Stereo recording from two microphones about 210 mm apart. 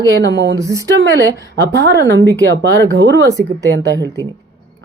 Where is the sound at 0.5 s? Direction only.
15° right (ahead or behind).